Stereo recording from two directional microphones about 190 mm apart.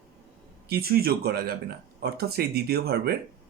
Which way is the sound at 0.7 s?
55° right (ahead or behind).